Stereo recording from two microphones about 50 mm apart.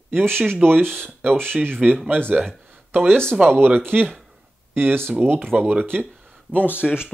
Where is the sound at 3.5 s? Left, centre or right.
Right.